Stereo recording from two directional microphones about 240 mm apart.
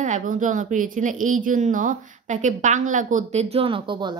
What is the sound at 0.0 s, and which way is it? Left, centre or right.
Speech, right.